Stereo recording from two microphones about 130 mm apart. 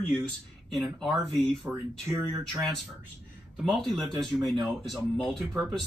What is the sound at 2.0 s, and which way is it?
Speech, 20° right (ahead or behind).